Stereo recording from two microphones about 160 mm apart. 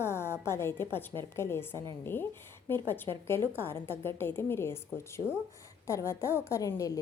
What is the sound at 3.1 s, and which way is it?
Speech, 30° right (ahead or behind).